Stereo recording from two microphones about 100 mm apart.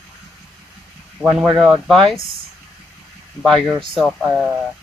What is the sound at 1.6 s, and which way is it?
Speech, centre (ahead or behind).